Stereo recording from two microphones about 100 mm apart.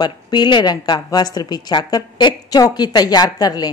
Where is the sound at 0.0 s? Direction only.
50° left (ahead or behind).